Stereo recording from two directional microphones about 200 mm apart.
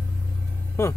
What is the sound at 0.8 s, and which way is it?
Speech, 10° left (ahead or behind).